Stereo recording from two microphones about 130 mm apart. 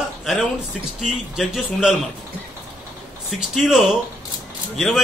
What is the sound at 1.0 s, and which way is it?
Speech, 5° right (ahead or behind).